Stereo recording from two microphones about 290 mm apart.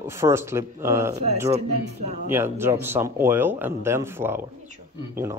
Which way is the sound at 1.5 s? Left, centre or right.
Right.